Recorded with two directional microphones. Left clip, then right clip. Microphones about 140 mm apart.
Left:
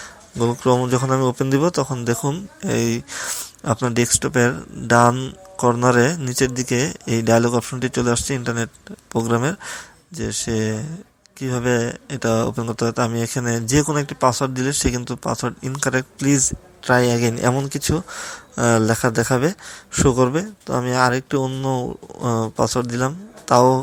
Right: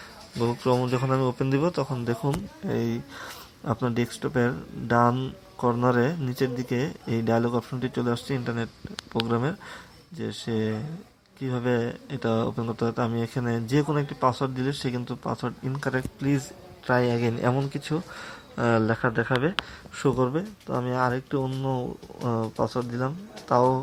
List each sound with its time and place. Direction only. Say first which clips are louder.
0.3 s speech: left 6 dB; 15° left (ahead or behind)
21.4 s speech: left 6 dB; 10° left (ahead or behind)